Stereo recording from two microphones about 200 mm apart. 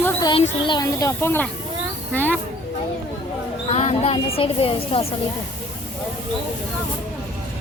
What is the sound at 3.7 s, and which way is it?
Speech, 35° left (ahead or behind).